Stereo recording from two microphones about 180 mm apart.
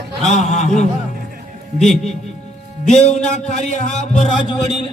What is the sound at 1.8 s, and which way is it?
Speech, centre (ahead or behind).